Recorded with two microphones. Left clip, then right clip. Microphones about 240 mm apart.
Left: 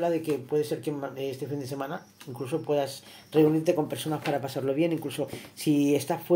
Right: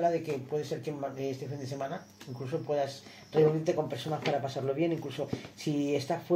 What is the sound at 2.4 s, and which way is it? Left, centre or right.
Speech, left.